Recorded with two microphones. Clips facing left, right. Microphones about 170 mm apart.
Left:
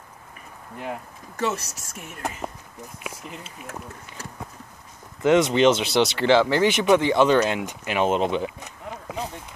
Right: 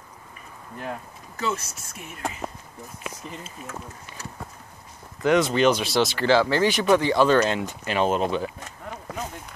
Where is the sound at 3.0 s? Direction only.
10° left (ahead or behind).